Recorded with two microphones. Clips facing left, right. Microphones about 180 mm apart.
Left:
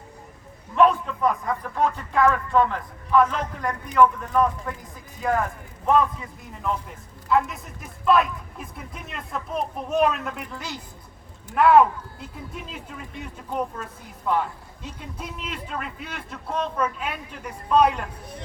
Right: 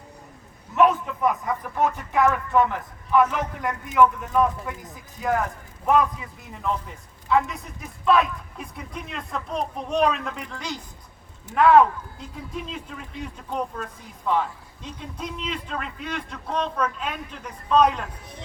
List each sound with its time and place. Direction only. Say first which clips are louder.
0.8 s a sound: left 1 dB; 20° right (ahead or behind)
1.2 s a man's voice: left 1 dB; 5° right (ahead or behind)
7.3 s a man's voice: even; centre (ahead or behind)
14.8 s a man's voice: right 2 dB; 5° left (ahead or behind)